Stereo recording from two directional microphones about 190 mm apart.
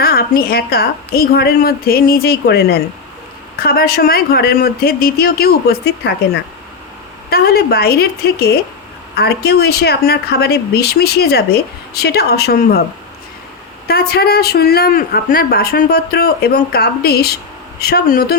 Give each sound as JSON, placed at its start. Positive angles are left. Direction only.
{"t": 0.0, "sound": "a woman's voice", "side_deg": 55}
{"t": 7.3, "sound": "speech", "side_deg": 55}
{"t": 13.8, "sound": "speech", "side_deg": 55}